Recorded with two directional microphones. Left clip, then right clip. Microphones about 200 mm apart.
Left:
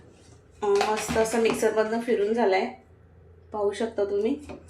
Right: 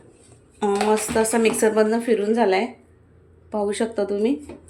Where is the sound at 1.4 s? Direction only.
60° right (ahead or behind).